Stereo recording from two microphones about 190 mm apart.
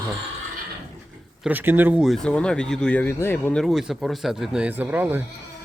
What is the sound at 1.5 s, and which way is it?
Speech, 10° right (ahead or behind).